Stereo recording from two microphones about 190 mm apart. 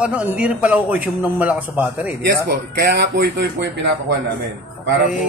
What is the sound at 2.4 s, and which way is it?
Speech, 55° right (ahead or behind).